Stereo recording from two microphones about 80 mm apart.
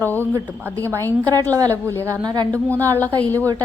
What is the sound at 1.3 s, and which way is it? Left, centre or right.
Speech, right.